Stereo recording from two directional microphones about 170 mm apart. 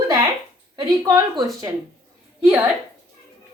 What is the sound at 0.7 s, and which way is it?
Speech, 20° right (ahead or behind).